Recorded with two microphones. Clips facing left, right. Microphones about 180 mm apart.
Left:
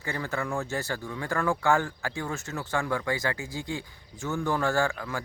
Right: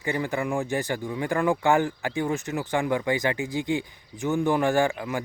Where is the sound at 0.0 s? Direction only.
15° right (ahead or behind).